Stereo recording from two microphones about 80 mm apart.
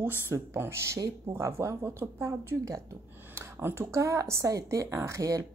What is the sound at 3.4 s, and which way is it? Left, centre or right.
Speech, right.